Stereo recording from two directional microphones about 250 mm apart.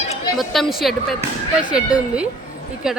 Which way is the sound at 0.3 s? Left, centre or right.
Centre.